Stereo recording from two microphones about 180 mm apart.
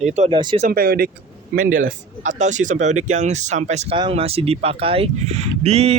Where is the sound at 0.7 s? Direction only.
55° right (ahead or behind).